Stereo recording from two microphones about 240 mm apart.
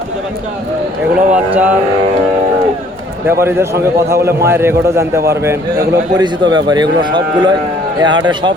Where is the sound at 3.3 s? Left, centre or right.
Centre.